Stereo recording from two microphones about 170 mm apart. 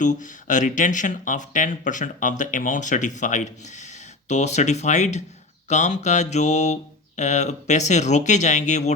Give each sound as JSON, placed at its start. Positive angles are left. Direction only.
{"t": 0.0, "sound": "speech", "side_deg": 45}